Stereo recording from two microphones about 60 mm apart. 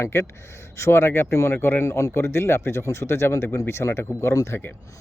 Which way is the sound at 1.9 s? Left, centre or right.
Left.